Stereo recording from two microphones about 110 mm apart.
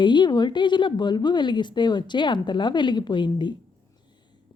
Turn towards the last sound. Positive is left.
turn(degrees=45)  # may be behind; listen again after turning